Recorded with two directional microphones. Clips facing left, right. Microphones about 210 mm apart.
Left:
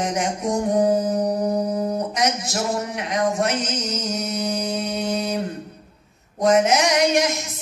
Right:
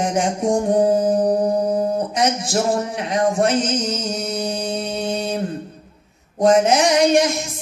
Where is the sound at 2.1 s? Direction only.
30° right (ahead or behind).